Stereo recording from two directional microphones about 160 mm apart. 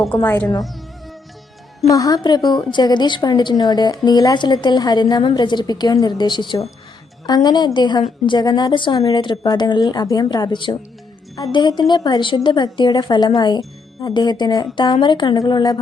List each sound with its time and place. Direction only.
0.2 s a woman's voice: 15° left (ahead or behind)
1.9 s a woman's voice: 25° left (ahead or behind)